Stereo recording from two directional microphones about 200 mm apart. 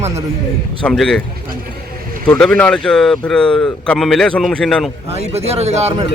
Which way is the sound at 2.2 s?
5° left (ahead or behind).